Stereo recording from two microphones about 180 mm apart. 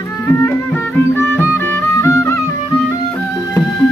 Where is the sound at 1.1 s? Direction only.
10° left (ahead or behind).